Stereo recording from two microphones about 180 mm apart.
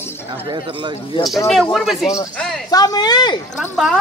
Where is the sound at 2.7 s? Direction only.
20° left (ahead or behind).